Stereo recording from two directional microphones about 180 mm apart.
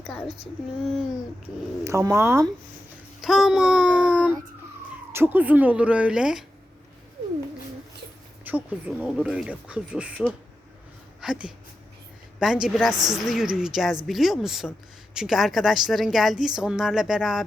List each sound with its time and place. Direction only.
1.8 s speech: 15° right (ahead or behind)
3.2 s a sound: centre (ahead or behind)
5.1 s speech: 10° right (ahead or behind)
8.4 s a woman's voice: 10° right (ahead or behind)
12.9 s a woman's voice: 20° right (ahead or behind)
13.1 s a woman's voice: centre (ahead or behind)